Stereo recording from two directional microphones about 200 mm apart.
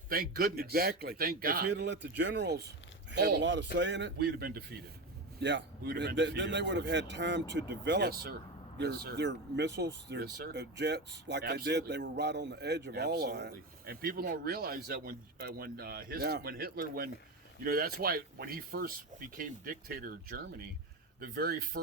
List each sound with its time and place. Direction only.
0.1 s a man's voice: 45° right (ahead or behind)